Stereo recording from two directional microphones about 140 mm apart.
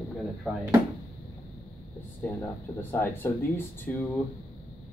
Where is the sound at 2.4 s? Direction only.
15° left (ahead or behind).